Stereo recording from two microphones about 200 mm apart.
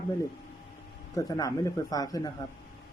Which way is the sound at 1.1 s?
15° left (ahead or behind).